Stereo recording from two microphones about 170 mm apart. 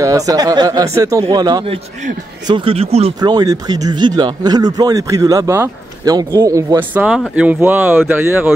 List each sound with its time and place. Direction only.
0.0 s speech: 20° right (ahead or behind); by 3.2 s 35° right (ahead or behind)
3.2 s speech: 25° right (ahead or behind)